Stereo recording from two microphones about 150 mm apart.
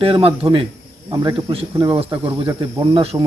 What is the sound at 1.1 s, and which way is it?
Speech, 30° right (ahead or behind).